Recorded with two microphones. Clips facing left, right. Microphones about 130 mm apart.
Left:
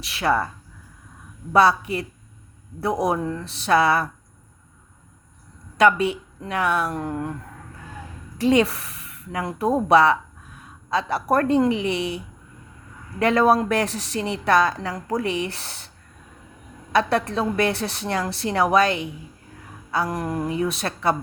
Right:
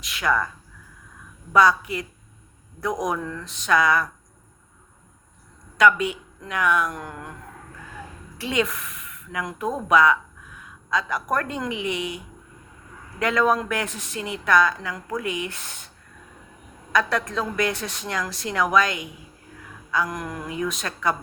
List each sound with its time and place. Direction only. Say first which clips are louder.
0.0 s a woman's voice: left 2 dB; 30° left (ahead or behind)
1.5 s a woman's voice: left 1 dB; 30° left (ahead or behind)
5.7 s a woman's voice: left 1 dB; 30° left (ahead or behind)
8.4 s a woman's voice: left 7 dB; 35° left (ahead or behind)
16.9 s a woman's voice: left 3 dB; 30° left (ahead or behind)